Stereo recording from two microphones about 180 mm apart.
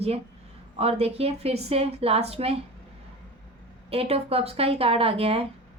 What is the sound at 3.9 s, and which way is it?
A woman's voice, 35° right (ahead or behind).